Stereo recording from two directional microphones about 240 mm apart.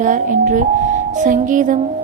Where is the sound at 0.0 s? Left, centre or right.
Right.